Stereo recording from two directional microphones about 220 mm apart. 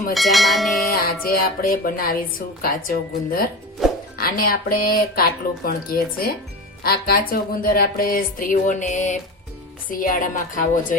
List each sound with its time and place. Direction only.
0.1 s a sound: centre (ahead or behind)
0.9 s speech: 45° left (ahead or behind)
3.8 s music: centre (ahead or behind)
4.2 s speech: 40° left (ahead or behind)